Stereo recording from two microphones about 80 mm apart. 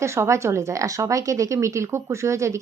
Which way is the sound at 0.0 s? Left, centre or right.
Right.